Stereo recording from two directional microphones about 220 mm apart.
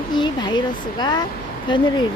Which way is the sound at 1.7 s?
20° left (ahead or behind).